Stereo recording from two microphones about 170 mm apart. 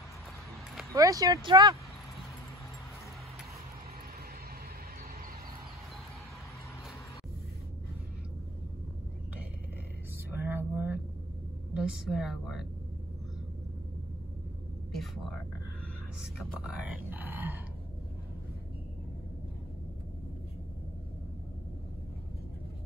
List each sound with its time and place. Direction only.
0.9 s speech: 20° right (ahead or behind)
10.3 s a sound: 10° right (ahead or behind)
11.7 s speech: 5° right (ahead or behind)
14.9 s speech: centre (ahead or behind)
16.6 s grunt: 10° right (ahead or behind)